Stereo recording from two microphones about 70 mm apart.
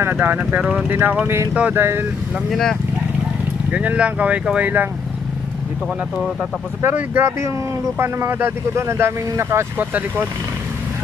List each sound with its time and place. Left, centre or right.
0.0 s speech: right
0.4 s speech: centre
0.8 s speech: right
1.5 s speech: centre
1.8 s speech: right
2.5 s speech: centre
3.7 s speech: centre
6.8 s speech: right
9.8 s speech: right